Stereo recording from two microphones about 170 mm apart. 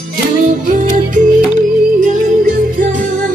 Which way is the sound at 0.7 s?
50° right (ahead or behind).